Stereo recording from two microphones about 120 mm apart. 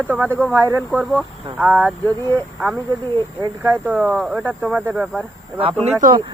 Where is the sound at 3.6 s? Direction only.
15° right (ahead or behind).